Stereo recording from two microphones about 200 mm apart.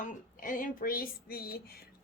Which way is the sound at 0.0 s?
45° left (ahead or behind).